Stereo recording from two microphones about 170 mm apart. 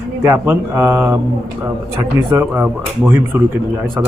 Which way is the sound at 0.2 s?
15° right (ahead or behind).